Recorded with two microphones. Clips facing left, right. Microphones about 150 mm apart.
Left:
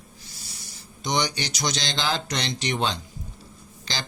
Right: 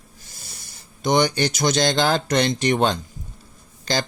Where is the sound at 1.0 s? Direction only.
55° right (ahead or behind).